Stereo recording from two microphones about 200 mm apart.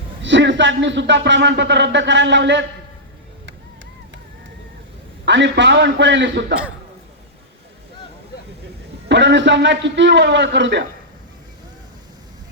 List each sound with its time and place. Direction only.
0.2 s speech: 65° right (ahead or behind)
5.2 s speech: 60° right (ahead or behind)
9.0 s speech: 60° right (ahead or behind)